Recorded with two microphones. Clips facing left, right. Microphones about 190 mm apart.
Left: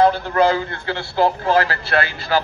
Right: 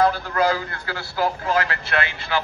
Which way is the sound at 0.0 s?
25° left (ahead or behind).